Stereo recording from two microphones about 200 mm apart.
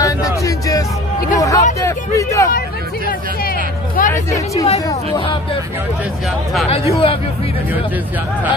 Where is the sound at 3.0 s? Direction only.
45° left (ahead or behind).